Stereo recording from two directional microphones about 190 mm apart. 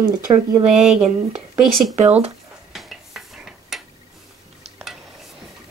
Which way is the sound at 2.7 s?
Centre (ahead or behind).